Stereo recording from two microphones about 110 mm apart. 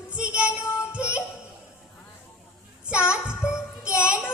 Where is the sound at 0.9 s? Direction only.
10° right (ahead or behind).